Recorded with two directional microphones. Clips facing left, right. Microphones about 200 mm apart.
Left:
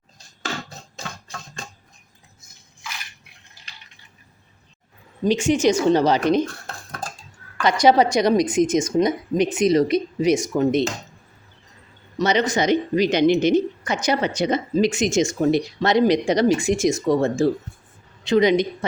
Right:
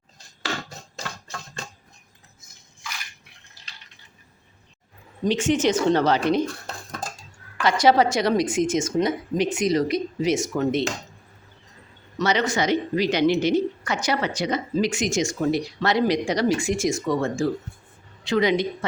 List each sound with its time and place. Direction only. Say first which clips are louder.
5.2 s a woman's voice: left 3 dB; 10° left (ahead or behind)
7.6 s a woman's voice: left 2 dB; 15° left (ahead or behind)
12.1 s speech: left 3 dB; 20° left (ahead or behind)